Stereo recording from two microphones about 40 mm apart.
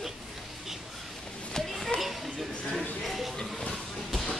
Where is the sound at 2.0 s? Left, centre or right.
Centre.